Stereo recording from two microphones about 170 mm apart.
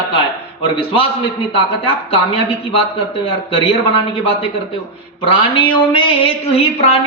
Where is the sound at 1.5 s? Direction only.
30° left (ahead or behind).